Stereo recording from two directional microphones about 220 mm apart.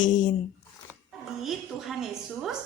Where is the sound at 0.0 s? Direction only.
35° left (ahead or behind).